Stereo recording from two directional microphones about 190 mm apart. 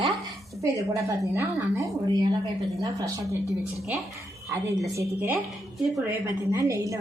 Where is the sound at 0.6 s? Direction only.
15° right (ahead or behind).